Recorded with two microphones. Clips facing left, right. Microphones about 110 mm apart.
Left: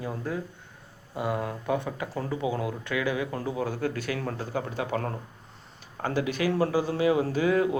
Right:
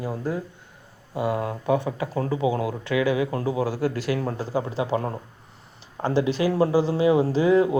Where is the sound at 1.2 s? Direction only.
25° right (ahead or behind).